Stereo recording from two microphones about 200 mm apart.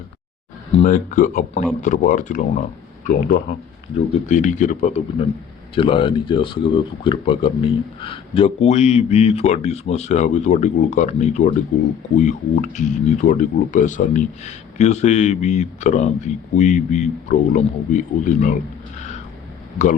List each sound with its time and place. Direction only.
0.7 s speech: 35° left (ahead or behind)